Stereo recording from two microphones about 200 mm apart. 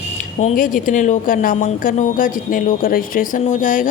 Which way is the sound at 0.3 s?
40° left (ahead or behind).